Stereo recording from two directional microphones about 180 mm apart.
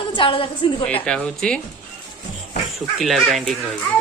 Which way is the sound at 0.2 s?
30° left (ahead or behind).